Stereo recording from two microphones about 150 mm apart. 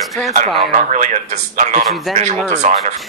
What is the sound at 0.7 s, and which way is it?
Speech, 50° right (ahead or behind).